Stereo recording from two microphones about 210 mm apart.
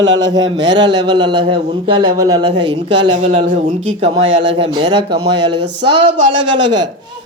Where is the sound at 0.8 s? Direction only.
20° right (ahead or behind).